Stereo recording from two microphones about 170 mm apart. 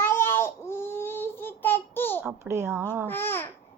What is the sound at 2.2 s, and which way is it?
Speech, 15° right (ahead or behind).